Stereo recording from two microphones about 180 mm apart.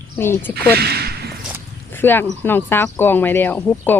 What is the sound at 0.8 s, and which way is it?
Speech, 60° right (ahead or behind).